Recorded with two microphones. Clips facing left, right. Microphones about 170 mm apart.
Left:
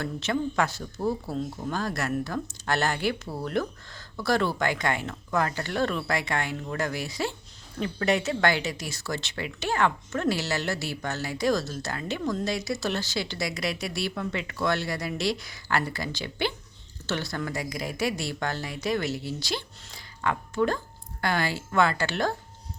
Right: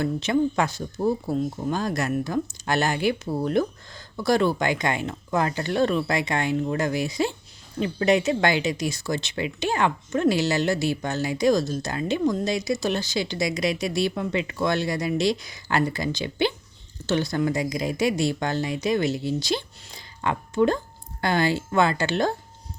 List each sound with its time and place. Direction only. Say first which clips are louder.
0.0 s speech: right 6 dB; 15° right (ahead or behind)